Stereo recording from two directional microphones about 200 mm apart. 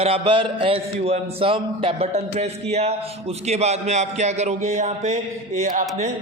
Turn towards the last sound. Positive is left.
turn(degrees=-35)  # may be behind; listen again after turning